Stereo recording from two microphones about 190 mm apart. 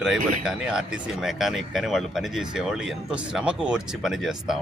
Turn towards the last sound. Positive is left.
turn(degrees=0)  # may be behind; listen again after turning